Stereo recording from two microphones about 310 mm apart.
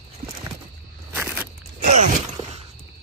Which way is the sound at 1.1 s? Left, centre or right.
Centre.